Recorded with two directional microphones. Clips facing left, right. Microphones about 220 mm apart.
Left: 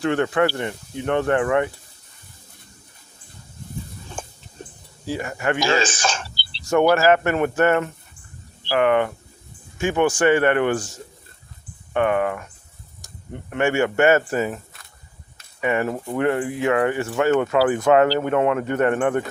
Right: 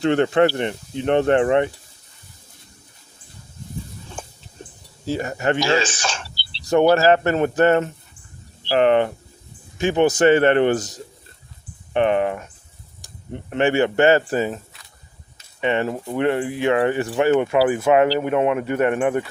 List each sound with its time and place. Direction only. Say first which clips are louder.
0.0 s speech: right 3 dB; 25° right (ahead or behind)
4.2 s a sound: left 2 dB; 50° left (ahead or behind)
5.0 s speech: right 2 dB; 30° right (ahead or behind)
5.5 s speech: right 1 dB; 50° left (ahead or behind)
6.6 s speech: right 2 dB; 35° right (ahead or behind)
11.9 s speech: right 2 dB; 25° right (ahead or behind)
13.0 s insect: right 3 dB; 30° right (ahead or behind)
13.7 s speech: right 1 dB; 30° right (ahead or behind)
15.6 s speech: right 1 dB; 25° right (ahead or behind)